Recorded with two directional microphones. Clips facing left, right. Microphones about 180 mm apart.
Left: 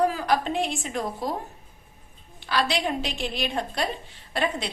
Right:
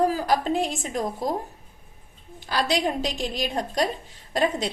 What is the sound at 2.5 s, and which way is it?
A woman's voice, 40° right (ahead or behind).